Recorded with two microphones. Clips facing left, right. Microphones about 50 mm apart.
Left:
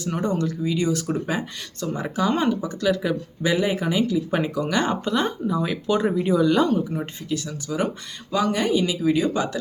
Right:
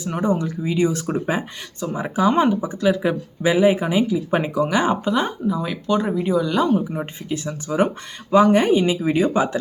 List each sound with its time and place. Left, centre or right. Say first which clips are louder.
0.0 s speech: right 3 dB; centre
6.7 s speech: right 3 dB; centre